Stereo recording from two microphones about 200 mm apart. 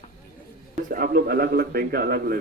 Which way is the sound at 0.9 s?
45° right (ahead or behind).